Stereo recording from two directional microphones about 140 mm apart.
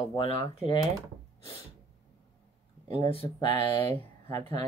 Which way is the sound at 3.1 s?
40° left (ahead or behind).